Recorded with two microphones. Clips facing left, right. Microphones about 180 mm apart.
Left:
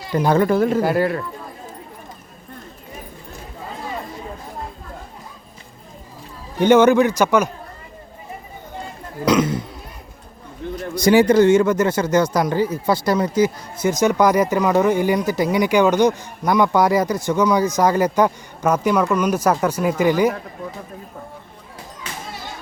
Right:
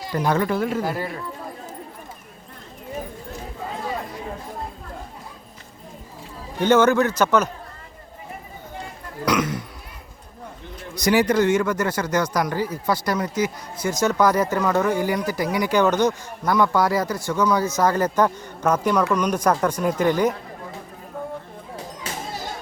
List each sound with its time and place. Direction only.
0.1 s speech: 30° left (ahead or behind)
0.8 s speech: 70° left (ahead or behind)
6.6 s speech: 15° left (ahead or behind)
9.2 s speech: 25° left (ahead or behind)
10.9 s speech: 25° left (ahead or behind); by 20.3 s 10° left (ahead or behind)